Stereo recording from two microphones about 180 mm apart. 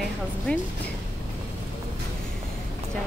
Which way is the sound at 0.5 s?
5° left (ahead or behind).